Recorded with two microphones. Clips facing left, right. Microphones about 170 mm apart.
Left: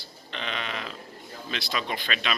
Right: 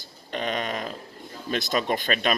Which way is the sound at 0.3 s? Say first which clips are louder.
Right 6 dB; 45° right (ahead or behind).